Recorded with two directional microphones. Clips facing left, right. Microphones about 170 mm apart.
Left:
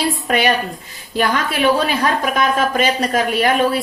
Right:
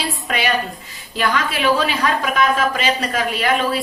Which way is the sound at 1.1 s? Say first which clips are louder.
Left 3 dB; 45° left (ahead or behind).